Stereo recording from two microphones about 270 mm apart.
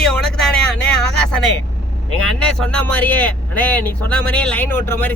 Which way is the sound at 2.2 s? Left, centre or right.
Centre.